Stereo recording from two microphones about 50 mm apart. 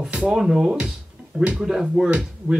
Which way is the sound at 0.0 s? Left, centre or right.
Centre.